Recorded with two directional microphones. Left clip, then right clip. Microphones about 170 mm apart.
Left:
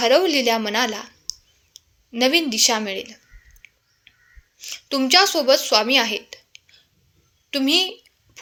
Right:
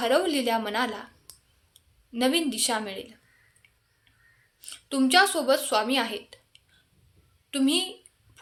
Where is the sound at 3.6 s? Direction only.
25° left (ahead or behind).